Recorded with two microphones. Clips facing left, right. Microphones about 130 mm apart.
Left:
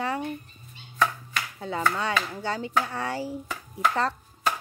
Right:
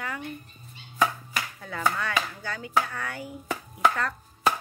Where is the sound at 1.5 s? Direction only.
25° left (ahead or behind).